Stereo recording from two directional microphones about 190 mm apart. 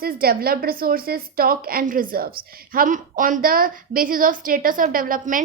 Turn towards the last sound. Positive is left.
turn(degrees=-45)  # may be behind; listen again after turning